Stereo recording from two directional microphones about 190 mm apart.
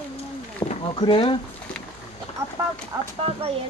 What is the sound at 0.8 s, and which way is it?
Speech, 25° left (ahead or behind).